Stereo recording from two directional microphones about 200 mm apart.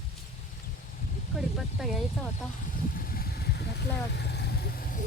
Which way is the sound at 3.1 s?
50° left (ahead or behind).